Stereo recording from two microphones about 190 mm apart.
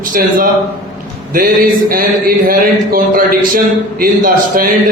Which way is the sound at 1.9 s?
50° right (ahead or behind).